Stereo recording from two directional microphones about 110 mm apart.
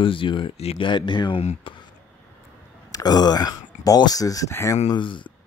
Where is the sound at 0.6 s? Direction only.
65° left (ahead or behind).